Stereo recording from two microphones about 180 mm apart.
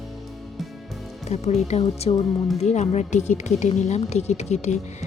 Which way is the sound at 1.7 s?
35° left (ahead or behind).